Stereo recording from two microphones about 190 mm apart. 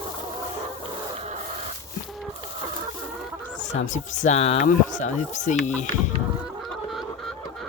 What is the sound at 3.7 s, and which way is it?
Speech, 40° left (ahead or behind).